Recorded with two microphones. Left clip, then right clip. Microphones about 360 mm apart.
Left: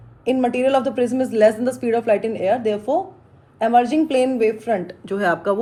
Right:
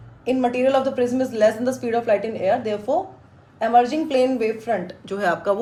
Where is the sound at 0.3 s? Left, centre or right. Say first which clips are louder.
Left 1 dB; left.